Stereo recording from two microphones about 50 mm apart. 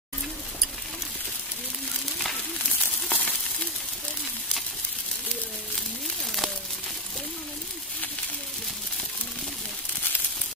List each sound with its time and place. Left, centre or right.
3.1 s sizzle: left